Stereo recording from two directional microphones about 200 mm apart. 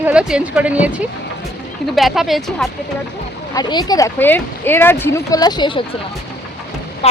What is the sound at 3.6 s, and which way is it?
Speech, 20° left (ahead or behind).